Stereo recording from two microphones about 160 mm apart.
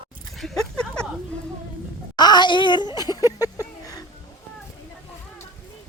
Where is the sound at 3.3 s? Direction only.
20° left (ahead or behind).